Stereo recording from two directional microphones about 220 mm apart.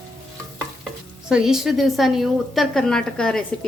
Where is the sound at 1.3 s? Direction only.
Centre (ahead or behind).